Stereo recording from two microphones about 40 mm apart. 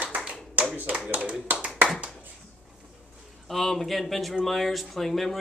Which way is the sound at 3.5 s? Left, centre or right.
Centre.